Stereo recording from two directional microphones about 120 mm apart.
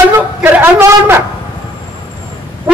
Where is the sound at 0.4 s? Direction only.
15° right (ahead or behind).